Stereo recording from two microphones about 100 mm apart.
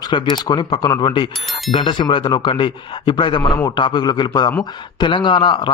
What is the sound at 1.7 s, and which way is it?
A man's voice, 55° left (ahead or behind).